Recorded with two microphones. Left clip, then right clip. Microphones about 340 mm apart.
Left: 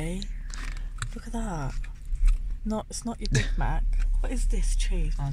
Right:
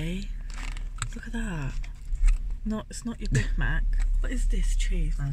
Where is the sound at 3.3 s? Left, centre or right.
Centre.